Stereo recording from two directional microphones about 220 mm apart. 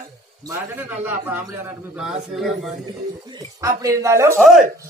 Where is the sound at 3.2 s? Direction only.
15° right (ahead or behind).